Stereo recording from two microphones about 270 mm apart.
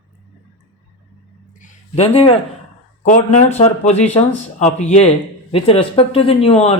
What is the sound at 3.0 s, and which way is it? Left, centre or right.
Speech, left.